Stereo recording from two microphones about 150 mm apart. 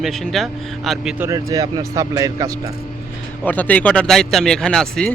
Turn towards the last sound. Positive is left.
turn(degrees=5)  # may be behind; listen again after turning